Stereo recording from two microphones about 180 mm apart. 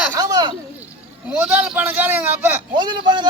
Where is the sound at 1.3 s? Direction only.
10° right (ahead or behind).